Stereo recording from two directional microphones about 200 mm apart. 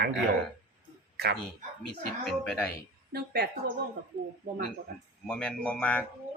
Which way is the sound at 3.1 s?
55° right (ahead or behind).